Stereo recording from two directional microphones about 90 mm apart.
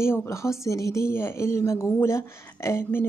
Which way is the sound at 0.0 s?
30° left (ahead or behind).